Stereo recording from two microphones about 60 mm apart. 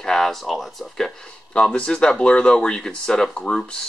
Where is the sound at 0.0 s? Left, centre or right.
Centre.